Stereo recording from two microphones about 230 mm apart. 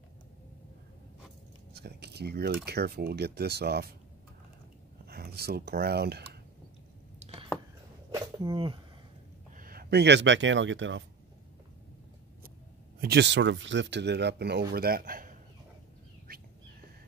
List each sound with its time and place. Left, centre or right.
1.7 s speech: right
5.0 s speech: right
7.2 s a sound: right
8.1 s a sound: centre
9.6 s speech: right
13.0 s speech: right
16.3 s bird: right